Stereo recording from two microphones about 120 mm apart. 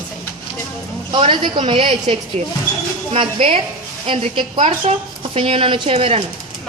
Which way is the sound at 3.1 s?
50° right (ahead or behind).